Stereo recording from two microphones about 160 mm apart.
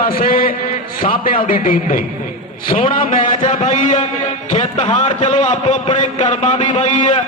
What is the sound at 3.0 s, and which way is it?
Speech, 55° left (ahead or behind).